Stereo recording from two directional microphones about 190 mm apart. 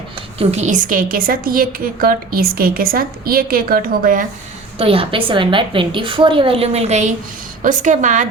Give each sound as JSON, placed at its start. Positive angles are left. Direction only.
{"t": 0.3, "sound": "a woman's voice", "side_deg": -35}
{"t": 4.8, "sound": "a woman's voice", "side_deg": -30}